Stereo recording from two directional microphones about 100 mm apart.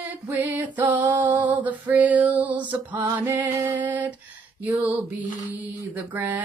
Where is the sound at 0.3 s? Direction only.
20° right (ahead or behind).